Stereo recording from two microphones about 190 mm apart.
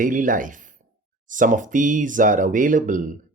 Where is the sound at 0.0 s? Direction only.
45° right (ahead or behind).